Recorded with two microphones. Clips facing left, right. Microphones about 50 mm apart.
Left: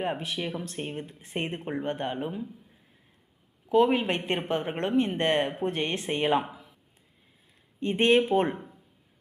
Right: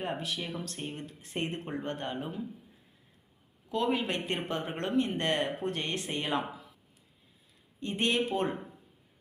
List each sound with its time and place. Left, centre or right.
0.0 s speech: left
3.7 s speech: left
7.8 s speech: left